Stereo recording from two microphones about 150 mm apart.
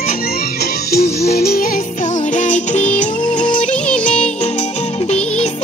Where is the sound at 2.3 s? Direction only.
55° left (ahead or behind).